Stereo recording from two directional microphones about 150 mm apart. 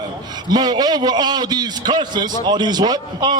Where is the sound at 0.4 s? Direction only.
25° right (ahead or behind).